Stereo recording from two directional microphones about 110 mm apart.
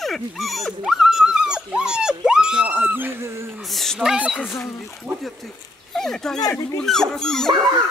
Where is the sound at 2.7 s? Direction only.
15° right (ahead or behind).